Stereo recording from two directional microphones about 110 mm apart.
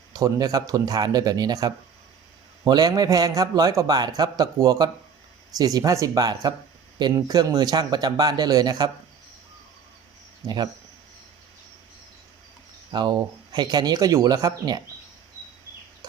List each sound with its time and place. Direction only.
0.1 s a man's voice: 35° right (ahead or behind)
10.4 s a man's voice: 40° right (ahead or behind)
12.9 s a man's voice: 40° right (ahead or behind)